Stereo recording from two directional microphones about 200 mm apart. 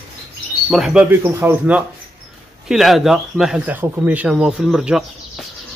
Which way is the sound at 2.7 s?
Centre (ahead or behind).